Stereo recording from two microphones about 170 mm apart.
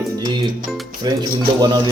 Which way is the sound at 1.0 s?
25° right (ahead or behind).